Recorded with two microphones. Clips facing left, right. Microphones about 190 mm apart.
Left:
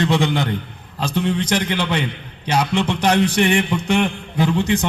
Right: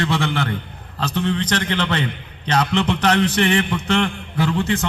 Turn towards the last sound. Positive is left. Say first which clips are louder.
# left 2 dB
turn(degrees=15)  # may be behind; listen again after turning